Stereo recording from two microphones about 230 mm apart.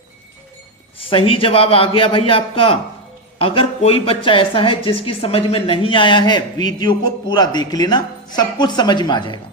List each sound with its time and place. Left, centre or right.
0.9 s speech: left